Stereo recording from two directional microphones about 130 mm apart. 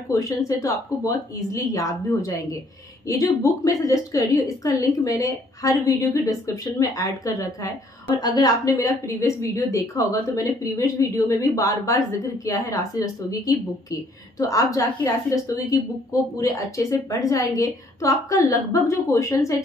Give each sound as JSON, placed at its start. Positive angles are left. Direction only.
{"t": 0.1, "sound": "a woman's voice", "side_deg": 25}